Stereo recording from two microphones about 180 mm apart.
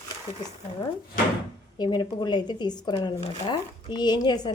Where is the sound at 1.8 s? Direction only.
25° left (ahead or behind).